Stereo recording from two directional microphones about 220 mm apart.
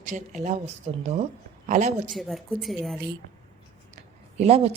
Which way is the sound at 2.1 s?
Centre (ahead or behind).